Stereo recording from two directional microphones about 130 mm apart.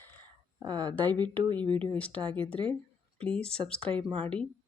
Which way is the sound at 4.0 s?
40° right (ahead or behind).